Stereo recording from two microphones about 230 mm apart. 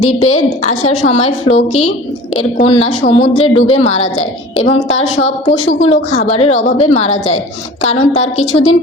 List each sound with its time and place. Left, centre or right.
0.0 s a woman's voice: left